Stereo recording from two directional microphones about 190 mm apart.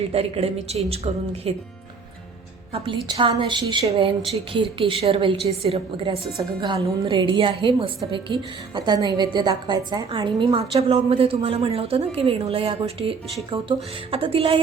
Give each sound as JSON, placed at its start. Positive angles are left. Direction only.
{"t": 0.1, "sound": "a woman's voice", "side_deg": -30}
{"t": 2.7, "sound": "a woman's voice", "side_deg": -30}